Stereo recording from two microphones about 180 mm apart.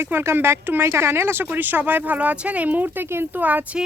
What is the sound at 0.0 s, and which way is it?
Speech, 15° right (ahead or behind).